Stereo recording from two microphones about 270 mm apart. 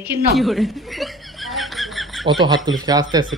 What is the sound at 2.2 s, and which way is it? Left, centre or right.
Speech, centre.